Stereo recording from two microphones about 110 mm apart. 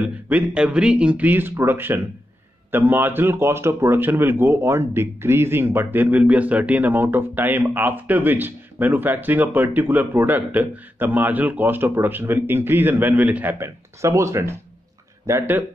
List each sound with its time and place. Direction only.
0.0 s speech: 15° right (ahead or behind)